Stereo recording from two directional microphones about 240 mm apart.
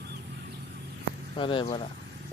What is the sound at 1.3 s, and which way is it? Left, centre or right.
Speech, left.